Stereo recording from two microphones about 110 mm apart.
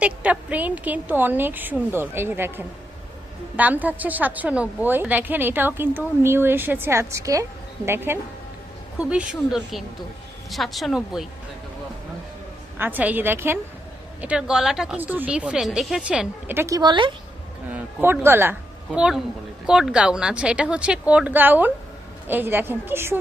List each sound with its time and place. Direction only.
0.0 s a woman's voice: 15° right (ahead or behind)
9.0 s a woman's voice: 10° right (ahead or behind)
12.8 s speech: 15° right (ahead or behind)
14.2 s speech: 10° right (ahead or behind)
14.9 s a woman's voice: 15° right (ahead or behind)
16.6 s speech: 30° right (ahead or behind)
16.8 s speech: 45° right (ahead or behind)
17.7 s speech: 20° right (ahead or behind)
18.9 s a woman's voice: 10° right (ahead or behind)